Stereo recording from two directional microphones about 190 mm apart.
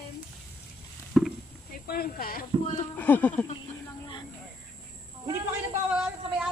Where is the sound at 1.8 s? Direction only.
50° left (ahead or behind).